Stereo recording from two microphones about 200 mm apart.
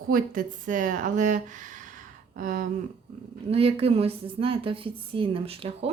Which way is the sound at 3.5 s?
30° right (ahead or behind).